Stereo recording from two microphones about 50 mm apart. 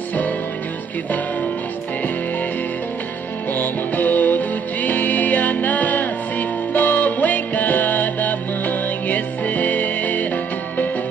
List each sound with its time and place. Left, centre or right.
3.5 s music: left